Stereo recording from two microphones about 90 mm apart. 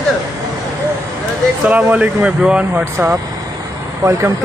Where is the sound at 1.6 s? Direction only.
15° right (ahead or behind).